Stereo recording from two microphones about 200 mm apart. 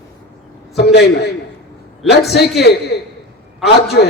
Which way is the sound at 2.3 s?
55° left (ahead or behind).